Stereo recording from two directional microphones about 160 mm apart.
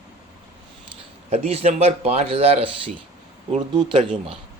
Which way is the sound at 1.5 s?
40° right (ahead or behind).